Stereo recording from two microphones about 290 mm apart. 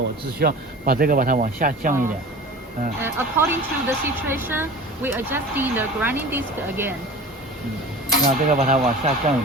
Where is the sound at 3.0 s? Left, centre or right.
Centre.